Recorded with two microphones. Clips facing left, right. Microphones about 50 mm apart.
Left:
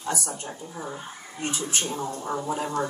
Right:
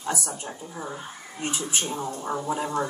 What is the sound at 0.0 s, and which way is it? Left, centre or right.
Speech, right.